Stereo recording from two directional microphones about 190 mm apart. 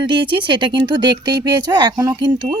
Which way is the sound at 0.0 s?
25° right (ahead or behind).